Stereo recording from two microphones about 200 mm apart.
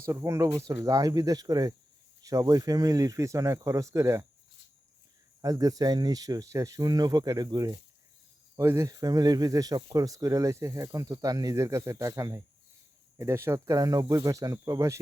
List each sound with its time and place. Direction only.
0.0 s speech: 15° right (ahead or behind)
5.4 s speech: 15° right (ahead or behind)